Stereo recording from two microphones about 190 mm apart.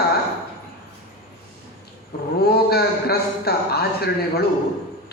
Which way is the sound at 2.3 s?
55° left (ahead or behind).